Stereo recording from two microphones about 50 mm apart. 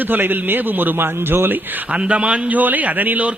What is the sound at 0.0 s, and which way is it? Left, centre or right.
A man's voice, right.